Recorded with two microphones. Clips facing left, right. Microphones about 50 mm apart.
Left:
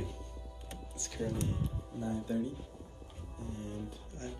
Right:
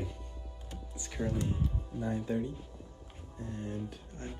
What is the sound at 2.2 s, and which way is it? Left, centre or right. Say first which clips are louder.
Speech: right 1 dB; right.